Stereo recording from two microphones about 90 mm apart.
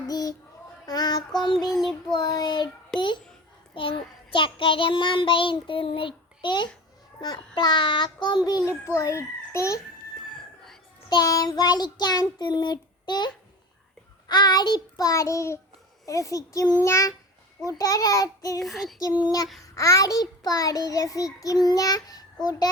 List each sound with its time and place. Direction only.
0.1 s speech: 45° left (ahead or behind)
0.9 s child singing: 45° left (ahead or behind)
1.7 s child singing: 5° left (ahead or behind)
2.1 s child singing: 50° left (ahead or behind)
2.9 s child singing: 5° left (ahead or behind)
3.8 s child singing: 75° left (ahead or behind); by 8.4 s 55° left (ahead or behind)
8.4 s child singing: 45° left (ahead or behind)
9.0 s a child's voice: 35° left (ahead or behind)
11.1 s child singing: 45° left (ahead or behind)
16.0 s a child's voice: 35° left (ahead or behind)
18.6 s child singing: centre (ahead or behind)
19.6 s child singing: 40° left (ahead or behind)